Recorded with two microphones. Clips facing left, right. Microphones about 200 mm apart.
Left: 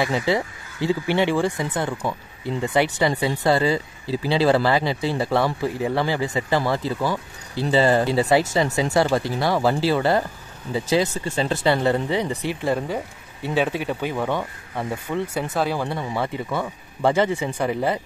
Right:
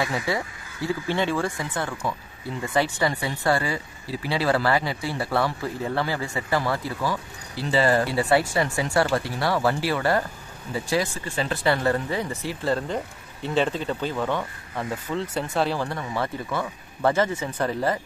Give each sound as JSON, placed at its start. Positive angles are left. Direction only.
{"t": 0.0, "sound": "speech", "side_deg": 25}
{"t": 16.0, "sound": "speech", "side_deg": 20}